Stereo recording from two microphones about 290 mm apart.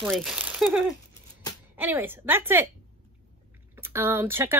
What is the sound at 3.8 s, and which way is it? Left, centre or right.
Speech, centre.